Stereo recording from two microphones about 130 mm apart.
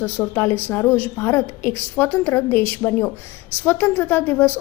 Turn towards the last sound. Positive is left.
turn(degrees=15)  # may be behind; listen again after turning